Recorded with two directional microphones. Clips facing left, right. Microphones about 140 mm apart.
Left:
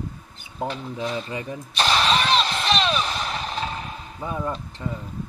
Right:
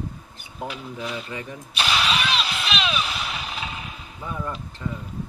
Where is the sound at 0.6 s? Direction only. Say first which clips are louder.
Left 4 dB; 30° left (ahead or behind).